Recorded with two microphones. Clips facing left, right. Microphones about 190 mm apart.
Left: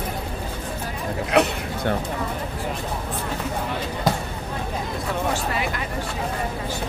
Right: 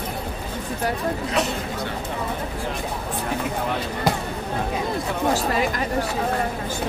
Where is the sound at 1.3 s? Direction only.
60° left (ahead or behind).